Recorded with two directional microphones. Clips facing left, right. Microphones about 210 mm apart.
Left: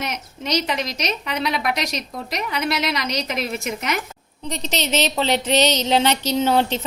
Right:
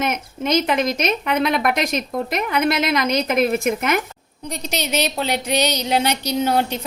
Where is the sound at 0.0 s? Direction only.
50° right (ahead or behind).